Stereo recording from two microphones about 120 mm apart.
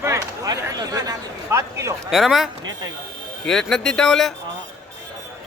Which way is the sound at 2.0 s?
Centre (ahead or behind).